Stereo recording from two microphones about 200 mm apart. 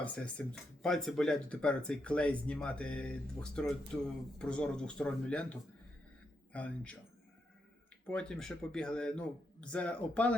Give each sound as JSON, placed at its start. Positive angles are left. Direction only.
{"t": 0.0, "sound": "speech", "side_deg": 5}
{"t": 8.0, "sound": "speech", "side_deg": 5}